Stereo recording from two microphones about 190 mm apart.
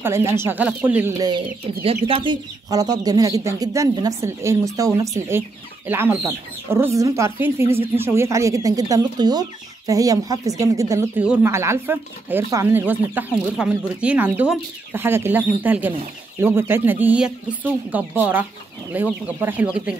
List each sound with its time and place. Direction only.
0.0 s speech: 15° right (ahead or behind)
1.2 s speech: 25° right (ahead or behind); by 20.0 s 5° right (ahead or behind)